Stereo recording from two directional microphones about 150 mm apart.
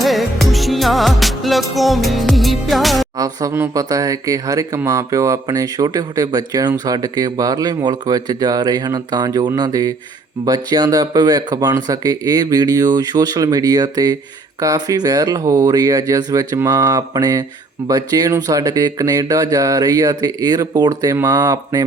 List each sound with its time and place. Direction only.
0.0 s music: centre (ahead or behind)
3.2 s speech: 25° right (ahead or behind)